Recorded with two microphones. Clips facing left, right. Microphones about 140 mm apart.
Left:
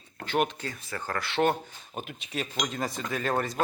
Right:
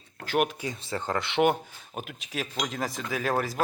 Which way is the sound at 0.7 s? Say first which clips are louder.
Right 4 dB; 25° right (ahead or behind).